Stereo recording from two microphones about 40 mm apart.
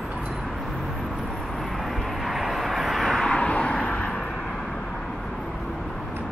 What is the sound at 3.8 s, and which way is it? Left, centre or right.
Vehicle, left.